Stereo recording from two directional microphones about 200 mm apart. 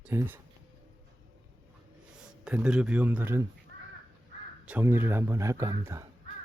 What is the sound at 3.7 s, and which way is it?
Crow, 55° right (ahead or behind).